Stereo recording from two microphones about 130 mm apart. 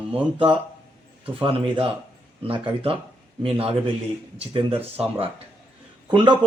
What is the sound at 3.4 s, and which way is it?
A man's voice, 45° right (ahead or behind).